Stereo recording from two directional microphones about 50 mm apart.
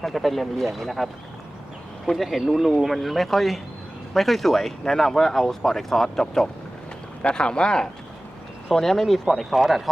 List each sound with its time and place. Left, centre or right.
0.0 s speech: centre
7.2 s speech: left; by 9.9 s centre